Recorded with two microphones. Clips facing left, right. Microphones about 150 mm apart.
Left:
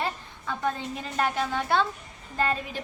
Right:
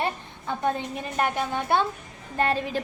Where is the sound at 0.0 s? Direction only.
20° right (ahead or behind).